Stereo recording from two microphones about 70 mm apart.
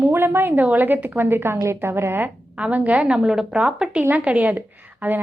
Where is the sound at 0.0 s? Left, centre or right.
Right.